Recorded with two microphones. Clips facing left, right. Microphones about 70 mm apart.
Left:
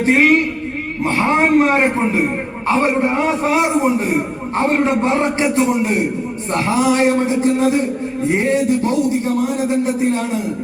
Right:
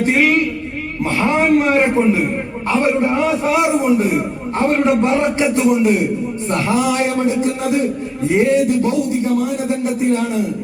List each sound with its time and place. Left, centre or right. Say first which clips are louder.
0.0 s a man's voice: left 2 dB; left
10.1 s a man's voice: right 2 dB; left